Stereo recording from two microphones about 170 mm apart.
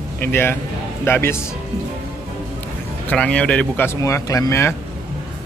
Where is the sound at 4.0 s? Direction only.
20° left (ahead or behind).